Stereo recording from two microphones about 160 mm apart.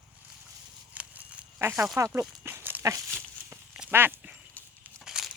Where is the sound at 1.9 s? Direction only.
20° right (ahead or behind).